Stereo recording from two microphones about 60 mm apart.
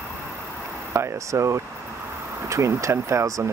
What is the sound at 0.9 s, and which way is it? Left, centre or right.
Speech, right.